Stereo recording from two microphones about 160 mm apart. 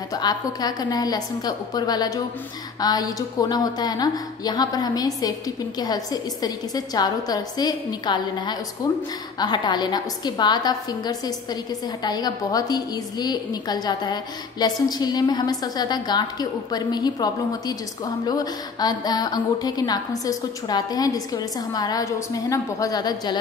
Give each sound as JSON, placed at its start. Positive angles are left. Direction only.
{"t": 0.1, "sound": "a woman's voice", "side_deg": 25}